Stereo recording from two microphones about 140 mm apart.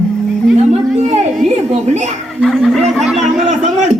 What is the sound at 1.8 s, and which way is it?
Speech, 55° right (ahead or behind).